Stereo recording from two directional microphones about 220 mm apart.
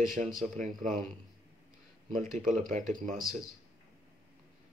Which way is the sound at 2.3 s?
35° right (ahead or behind).